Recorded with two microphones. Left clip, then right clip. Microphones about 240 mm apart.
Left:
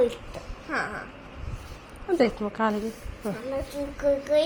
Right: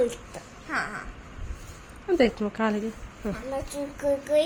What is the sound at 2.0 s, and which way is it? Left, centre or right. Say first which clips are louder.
Speech: right 1 dB; right.